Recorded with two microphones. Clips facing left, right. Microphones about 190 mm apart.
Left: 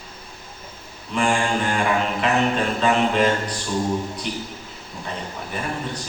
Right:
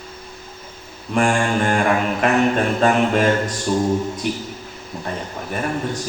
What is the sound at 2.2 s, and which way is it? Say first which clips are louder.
Speech: right 4 dB; 50° right (ahead or behind).